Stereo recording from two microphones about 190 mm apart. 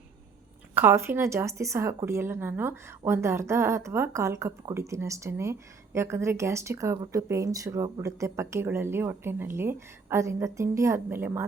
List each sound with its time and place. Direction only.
0.7 s a woman's voice: 10° right (ahead or behind)